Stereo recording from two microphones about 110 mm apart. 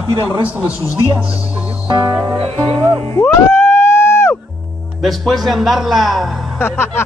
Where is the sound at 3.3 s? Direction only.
25° left (ahead or behind).